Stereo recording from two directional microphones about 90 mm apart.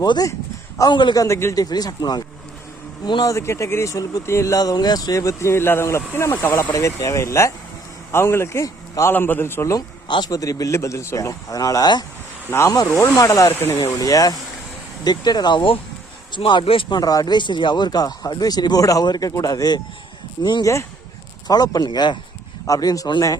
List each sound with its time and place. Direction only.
0.0 s speech: 45° left (ahead or behind)
0.9 s speech: 55° left (ahead or behind)
1.2 s a man's voice: 30° left (ahead or behind)
1.7 s speech: 45° left (ahead or behind)
3.3 s a man's voice: 30° left (ahead or behind)
9.7 s a man's voice: 50° left (ahead or behind)
13.5 s speech: 25° left (ahead or behind)
13.8 s a man's voice: 40° left (ahead or behind); by 17.0 s 70° left (ahead or behind)
17.0 s a man's voice: 45° left (ahead or behind)
22.6 s speech: 45° left (ahead or behind)